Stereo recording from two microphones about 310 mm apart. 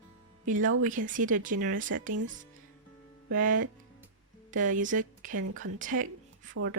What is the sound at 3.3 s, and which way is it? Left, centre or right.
Speech, right.